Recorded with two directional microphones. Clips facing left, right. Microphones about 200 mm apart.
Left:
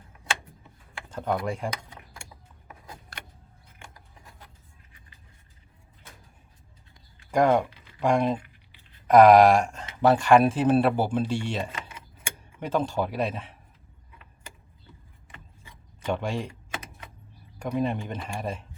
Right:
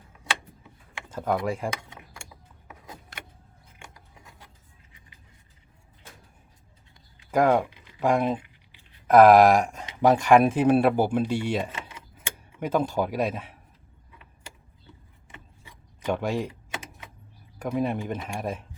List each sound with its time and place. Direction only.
1.1 s speech: 5° right (ahead or behind)
4.9 s music: 15° right (ahead or behind)
7.3 s speech: 5° right (ahead or behind)
15.6 s a sound: 10° right (ahead or behind)
17.6 s speech: 5° right (ahead or behind)